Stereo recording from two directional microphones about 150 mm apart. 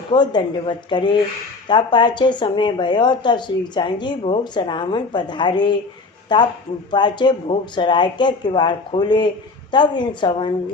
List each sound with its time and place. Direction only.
0.1 s a woman's voice: 30° left (ahead or behind)